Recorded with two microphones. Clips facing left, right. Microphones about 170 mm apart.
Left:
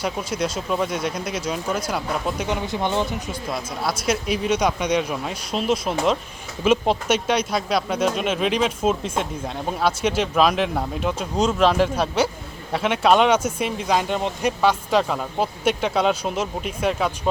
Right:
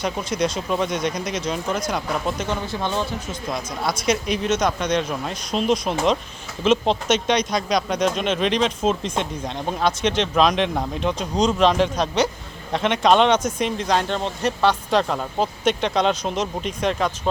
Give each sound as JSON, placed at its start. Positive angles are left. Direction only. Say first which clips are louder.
{"t": 0.0, "sound": "speech", "louder": "right 2 dB", "side_deg": 5}
{"t": 2.5, "sound": "speech", "louder": "left 1 dB", "side_deg": 15}
{"t": 3.5, "sound": "speech", "louder": "right 1 dB", "side_deg": 5}